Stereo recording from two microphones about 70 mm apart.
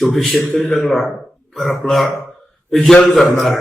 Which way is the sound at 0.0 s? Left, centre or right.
Centre.